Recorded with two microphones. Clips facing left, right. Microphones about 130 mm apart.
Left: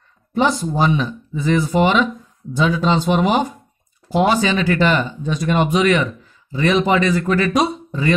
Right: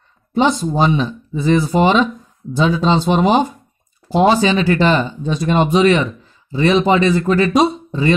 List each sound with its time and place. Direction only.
0.3 s speech: 25° right (ahead or behind)